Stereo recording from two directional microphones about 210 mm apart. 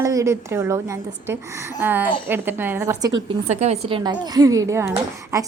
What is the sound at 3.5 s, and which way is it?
A woman's voice, 30° right (ahead or behind).